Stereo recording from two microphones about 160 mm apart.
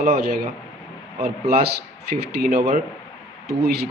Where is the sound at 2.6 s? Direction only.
45° right (ahead or behind).